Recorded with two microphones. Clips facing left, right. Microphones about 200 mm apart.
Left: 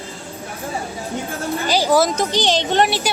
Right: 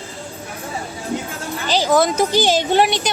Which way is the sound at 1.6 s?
10° left (ahead or behind).